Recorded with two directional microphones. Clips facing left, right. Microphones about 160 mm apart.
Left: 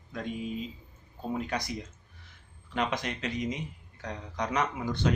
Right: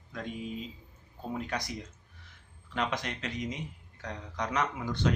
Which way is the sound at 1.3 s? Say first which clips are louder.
Left 3 dB; 15° left (ahead or behind).